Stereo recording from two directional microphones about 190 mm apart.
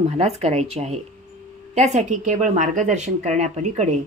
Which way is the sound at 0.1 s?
35° right (ahead or behind).